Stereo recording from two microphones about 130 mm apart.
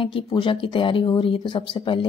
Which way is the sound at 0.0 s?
45° left (ahead or behind).